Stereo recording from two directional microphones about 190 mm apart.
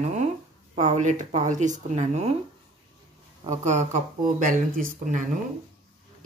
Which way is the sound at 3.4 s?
40° right (ahead or behind).